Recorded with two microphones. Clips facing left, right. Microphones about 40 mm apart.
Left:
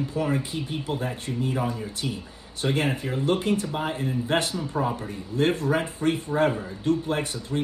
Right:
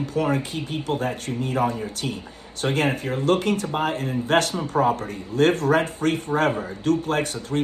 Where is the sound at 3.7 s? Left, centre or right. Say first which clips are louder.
Right 4 dB; right.